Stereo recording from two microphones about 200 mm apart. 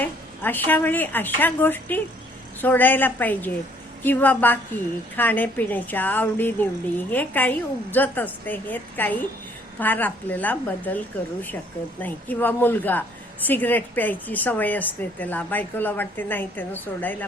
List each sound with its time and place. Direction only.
0.0 s a woman's voice: 10° left (ahead or behind)